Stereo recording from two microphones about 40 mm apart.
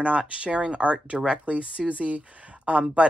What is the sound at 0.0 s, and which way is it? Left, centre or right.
Speech, right.